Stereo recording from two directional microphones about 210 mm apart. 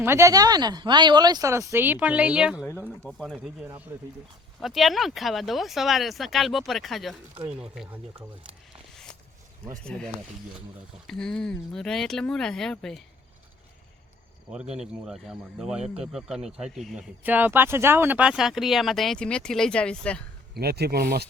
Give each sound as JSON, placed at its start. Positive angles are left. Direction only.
{"t": 0.0, "sound": "speech", "side_deg": -10}
{"t": 9.8, "sound": "speech", "side_deg": 5}
{"t": 14.5, "sound": "speech", "side_deg": -5}
{"t": 20.5, "sound": "speech", "side_deg": -50}